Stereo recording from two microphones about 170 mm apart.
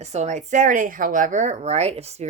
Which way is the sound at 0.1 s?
45° right (ahead or behind).